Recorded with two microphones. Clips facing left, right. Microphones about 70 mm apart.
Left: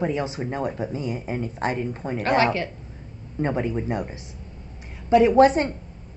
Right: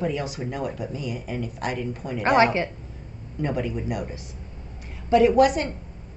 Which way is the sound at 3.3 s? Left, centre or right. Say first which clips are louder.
Left 2 dB; left.